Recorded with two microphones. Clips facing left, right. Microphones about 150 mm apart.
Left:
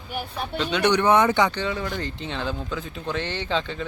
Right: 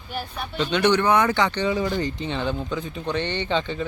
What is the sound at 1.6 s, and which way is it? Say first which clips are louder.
Speech: right 5 dB; 5° right (ahead or behind).